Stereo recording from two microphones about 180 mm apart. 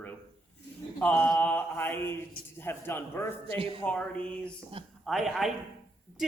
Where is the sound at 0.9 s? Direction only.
5° left (ahead or behind).